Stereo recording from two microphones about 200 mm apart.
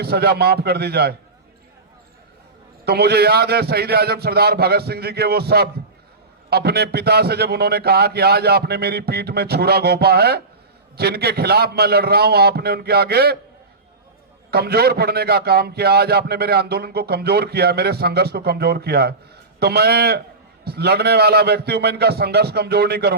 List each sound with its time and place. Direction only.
0.0 s a man's voice: 55° right (ahead or behind)
2.8 s a man's voice: 55° right (ahead or behind)
14.5 s a man's voice: 50° right (ahead or behind)